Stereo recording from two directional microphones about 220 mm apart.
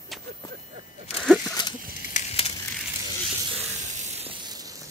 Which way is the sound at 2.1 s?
25° left (ahead or behind).